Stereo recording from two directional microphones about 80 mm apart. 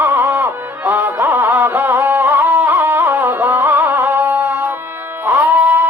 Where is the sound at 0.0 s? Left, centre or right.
Right.